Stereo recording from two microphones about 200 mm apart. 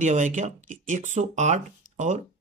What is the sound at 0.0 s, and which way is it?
Speech, 40° right (ahead or behind).